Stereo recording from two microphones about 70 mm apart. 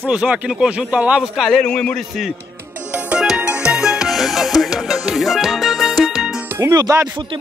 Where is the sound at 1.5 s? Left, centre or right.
Centre.